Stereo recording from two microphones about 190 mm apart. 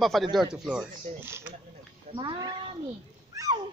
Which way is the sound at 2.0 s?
25° right (ahead or behind).